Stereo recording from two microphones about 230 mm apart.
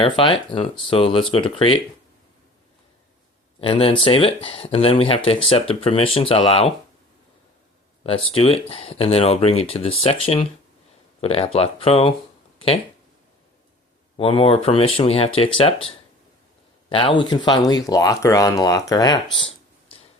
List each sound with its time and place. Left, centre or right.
0.0 s speech: left
3.6 s speech: left
8.0 s speech: left
12.5 s a sound: left
14.2 s speech: left
16.9 s speech: left
19.4 s a sound: left